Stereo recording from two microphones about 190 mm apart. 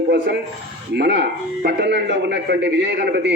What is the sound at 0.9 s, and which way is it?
A man's voice, 60° right (ahead or behind).